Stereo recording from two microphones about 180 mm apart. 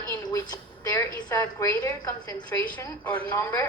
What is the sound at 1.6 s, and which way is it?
A woman's voice, 15° left (ahead or behind).